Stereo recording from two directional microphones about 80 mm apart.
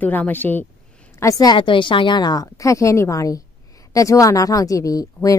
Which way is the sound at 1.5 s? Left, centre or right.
Left.